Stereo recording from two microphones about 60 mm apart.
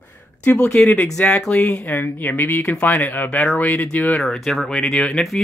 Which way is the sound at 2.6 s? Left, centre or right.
Left.